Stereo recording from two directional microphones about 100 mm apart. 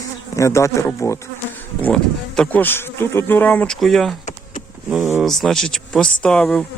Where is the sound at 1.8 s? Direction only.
10° left (ahead or behind).